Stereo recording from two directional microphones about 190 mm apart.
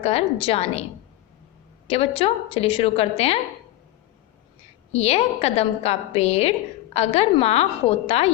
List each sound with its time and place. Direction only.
0.0 s a woman's voice: 30° left (ahead or behind)
1.9 s a woman's voice: 30° left (ahead or behind)
4.9 s a woman's voice: 35° left (ahead or behind)